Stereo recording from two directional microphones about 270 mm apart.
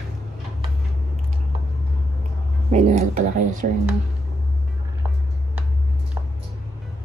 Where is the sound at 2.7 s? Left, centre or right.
Right.